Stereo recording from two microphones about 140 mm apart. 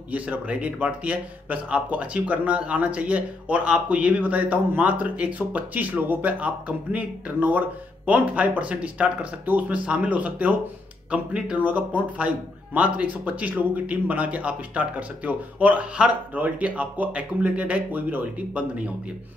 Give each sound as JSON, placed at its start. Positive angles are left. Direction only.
{"t": 0.1, "sound": "speech", "side_deg": -10}